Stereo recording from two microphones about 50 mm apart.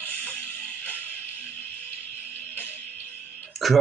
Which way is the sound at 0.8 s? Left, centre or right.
Left.